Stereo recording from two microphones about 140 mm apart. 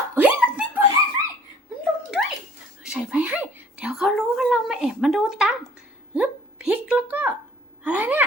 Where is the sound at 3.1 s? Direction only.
10° right (ahead or behind).